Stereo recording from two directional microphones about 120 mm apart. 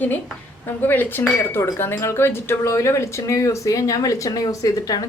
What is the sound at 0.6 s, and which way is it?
Speech, 15° left (ahead or behind).